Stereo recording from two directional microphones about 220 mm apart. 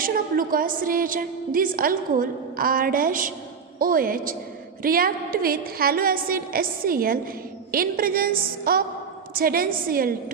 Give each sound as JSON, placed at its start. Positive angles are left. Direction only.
{"t": 0.0, "sound": "a woman's voice", "side_deg": -40}